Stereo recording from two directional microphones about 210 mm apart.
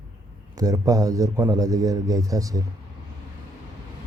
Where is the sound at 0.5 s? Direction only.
15° right (ahead or behind).